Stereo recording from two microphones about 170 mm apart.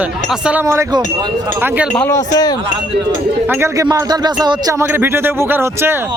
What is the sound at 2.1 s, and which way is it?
Speech, 20° left (ahead or behind).